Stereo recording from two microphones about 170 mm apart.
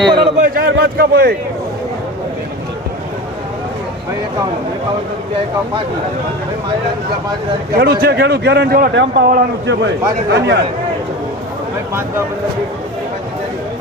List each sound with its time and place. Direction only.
0.0 s a man's voice: 25° right (ahead or behind)
0.4 s a man's voice: 60° right (ahead or behind)
8.0 s speech: 75° right (ahead or behind)
10.2 s speech: 90° right